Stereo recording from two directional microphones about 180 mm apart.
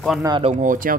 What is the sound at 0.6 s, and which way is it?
Speech, 50° right (ahead or behind).